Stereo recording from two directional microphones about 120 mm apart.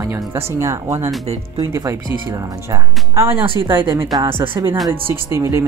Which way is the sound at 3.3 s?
45° right (ahead or behind).